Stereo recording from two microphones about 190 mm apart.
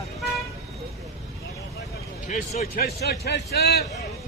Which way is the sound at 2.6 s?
55° left (ahead or behind).